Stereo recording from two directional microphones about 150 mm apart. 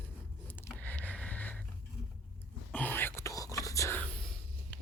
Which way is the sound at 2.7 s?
10° left (ahead or behind).